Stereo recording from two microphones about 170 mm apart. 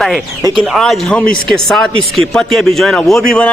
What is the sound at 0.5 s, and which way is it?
A man's voice, centre (ahead or behind).